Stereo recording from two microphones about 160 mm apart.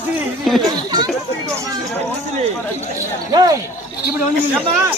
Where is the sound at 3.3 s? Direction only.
25° right (ahead or behind).